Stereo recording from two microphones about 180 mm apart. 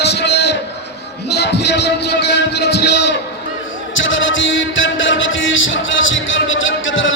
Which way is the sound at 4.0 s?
90° left.